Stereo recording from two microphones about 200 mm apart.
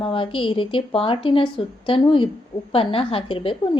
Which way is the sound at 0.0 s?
25° left (ahead or behind).